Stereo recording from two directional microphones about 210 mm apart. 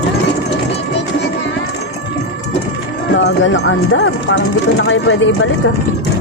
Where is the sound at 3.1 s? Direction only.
65° left (ahead or behind).